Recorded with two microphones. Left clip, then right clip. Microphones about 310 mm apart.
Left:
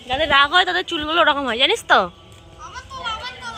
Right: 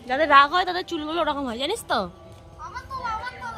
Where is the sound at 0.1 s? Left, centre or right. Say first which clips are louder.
Left 1 dB; centre.